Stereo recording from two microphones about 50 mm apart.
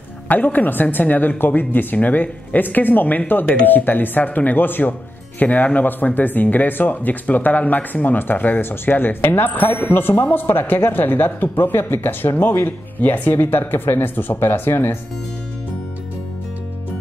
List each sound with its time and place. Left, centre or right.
0.3 s speech: left